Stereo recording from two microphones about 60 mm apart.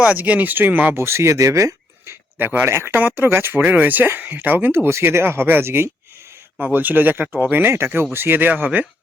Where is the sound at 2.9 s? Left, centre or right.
Right.